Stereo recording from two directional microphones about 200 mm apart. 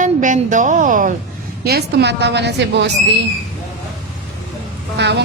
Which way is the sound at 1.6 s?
55° right (ahead or behind).